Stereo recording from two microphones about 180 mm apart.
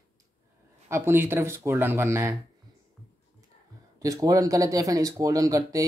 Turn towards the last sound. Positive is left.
turn(degrees=-20)  # may be behind; listen again after turning